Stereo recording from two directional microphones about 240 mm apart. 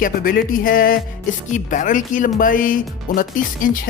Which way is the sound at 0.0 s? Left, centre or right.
Left.